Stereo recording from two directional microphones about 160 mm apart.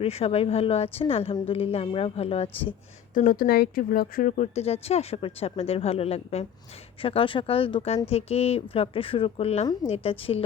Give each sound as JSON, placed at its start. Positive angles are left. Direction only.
{"t": 0.0, "sound": "speech", "side_deg": 40}
{"t": 3.2, "sound": "speech", "side_deg": 60}